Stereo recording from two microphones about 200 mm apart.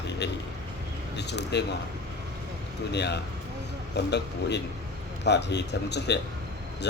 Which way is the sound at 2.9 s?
55° left (ahead or behind).